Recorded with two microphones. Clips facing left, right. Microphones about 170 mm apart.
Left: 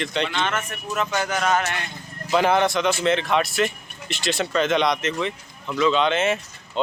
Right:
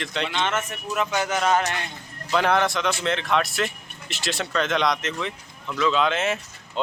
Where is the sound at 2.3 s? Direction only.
Centre (ahead or behind).